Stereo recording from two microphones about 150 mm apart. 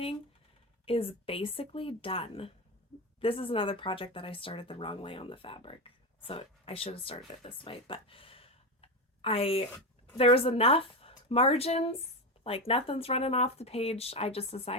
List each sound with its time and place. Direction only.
0.9 s speech: 40° left (ahead or behind)